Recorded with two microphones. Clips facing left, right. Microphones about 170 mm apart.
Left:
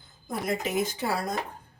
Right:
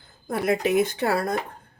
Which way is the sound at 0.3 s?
65° right (ahead or behind).